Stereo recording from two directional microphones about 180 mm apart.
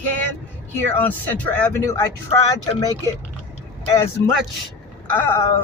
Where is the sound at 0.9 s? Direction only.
10° left (ahead or behind).